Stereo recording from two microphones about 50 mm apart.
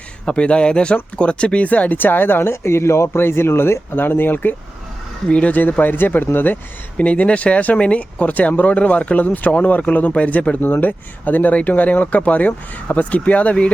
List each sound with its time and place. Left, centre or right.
0.3 s speech: left
3.2 s speech: left
5.3 s speech: left
5.8 s speech: left
6.9 s speech: left
10.6 s speech: left